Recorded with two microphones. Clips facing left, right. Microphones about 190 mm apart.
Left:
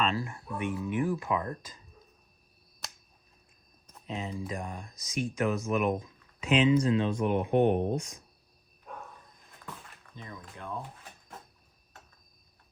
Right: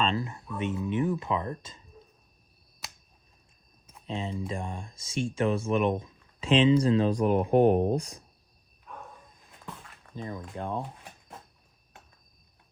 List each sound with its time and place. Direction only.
0.0 s speech: 25° right (ahead or behind)
2.8 s finger snapping: 5° right (ahead or behind)
4.1 s speech: 30° right (ahead or behind)
10.2 s speech: 30° right (ahead or behind)